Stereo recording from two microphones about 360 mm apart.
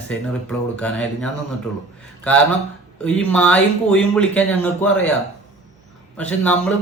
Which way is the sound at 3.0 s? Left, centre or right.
Centre.